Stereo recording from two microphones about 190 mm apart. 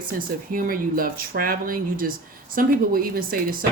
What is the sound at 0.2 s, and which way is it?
Speech, 50° right (ahead or behind).